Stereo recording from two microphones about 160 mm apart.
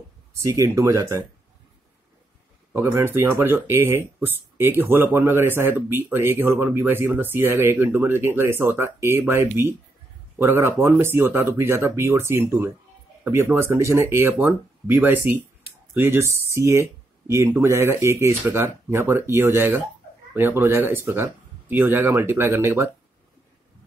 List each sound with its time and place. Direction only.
0.4 s speech: 20° right (ahead or behind)
2.7 s speech: 15° right (ahead or behind)